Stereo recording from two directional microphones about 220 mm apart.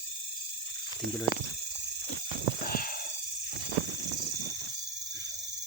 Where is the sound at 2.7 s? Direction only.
40° left (ahead or behind).